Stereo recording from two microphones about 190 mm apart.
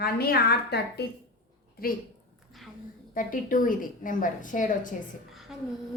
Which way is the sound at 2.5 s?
Centre (ahead or behind).